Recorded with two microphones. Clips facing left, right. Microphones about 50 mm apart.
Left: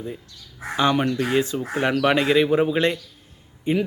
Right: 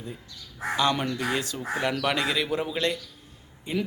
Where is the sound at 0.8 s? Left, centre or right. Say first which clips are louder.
Left 6 dB; left.